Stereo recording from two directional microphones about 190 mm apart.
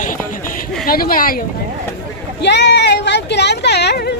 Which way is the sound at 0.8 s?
50° left (ahead or behind).